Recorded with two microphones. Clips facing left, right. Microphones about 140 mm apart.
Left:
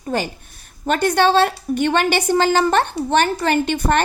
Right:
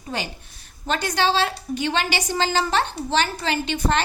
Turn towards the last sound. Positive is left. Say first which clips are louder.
# left 5 dB
turn(degrees=55)  # may be behind; listen again after turning